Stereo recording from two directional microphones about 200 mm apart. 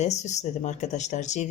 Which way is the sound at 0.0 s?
35° left (ahead or behind).